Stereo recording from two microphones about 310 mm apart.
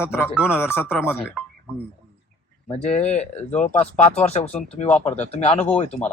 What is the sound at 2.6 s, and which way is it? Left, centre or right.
Speech, centre.